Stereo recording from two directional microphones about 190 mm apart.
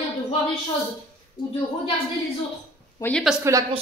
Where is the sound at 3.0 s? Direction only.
10° left (ahead or behind).